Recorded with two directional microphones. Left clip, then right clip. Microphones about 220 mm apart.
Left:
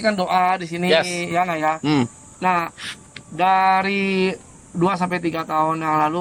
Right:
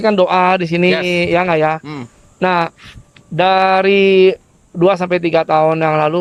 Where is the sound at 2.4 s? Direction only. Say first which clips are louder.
Right 5 dB; 50° right (ahead or behind).